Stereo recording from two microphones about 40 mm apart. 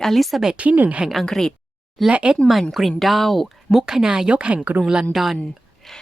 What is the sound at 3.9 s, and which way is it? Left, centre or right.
Speech, centre.